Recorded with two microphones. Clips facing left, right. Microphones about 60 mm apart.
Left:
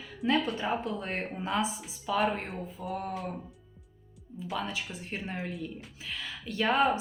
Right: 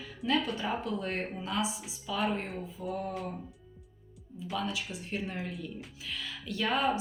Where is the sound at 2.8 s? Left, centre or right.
Left.